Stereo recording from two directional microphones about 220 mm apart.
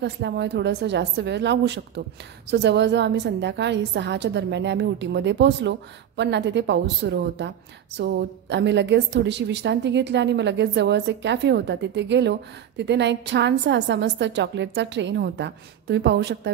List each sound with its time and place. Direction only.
0.0 s a woman's voice: 50° right (ahead or behind)